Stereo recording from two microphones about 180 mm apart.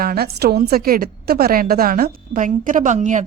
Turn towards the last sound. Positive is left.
turn(degrees=-45)  # may be behind; listen again after turning